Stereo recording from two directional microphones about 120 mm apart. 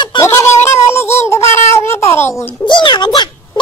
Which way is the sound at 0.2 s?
20° left (ahead or behind).